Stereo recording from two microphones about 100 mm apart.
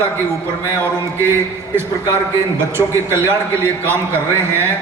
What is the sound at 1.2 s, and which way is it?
A man's voice, 25° right (ahead or behind).